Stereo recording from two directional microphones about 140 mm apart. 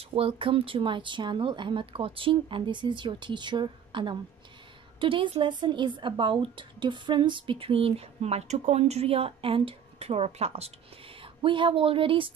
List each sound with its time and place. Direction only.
0.0 s a woman's voice: 40° right (ahead or behind)
11.4 s a woman's voice: 35° right (ahead or behind)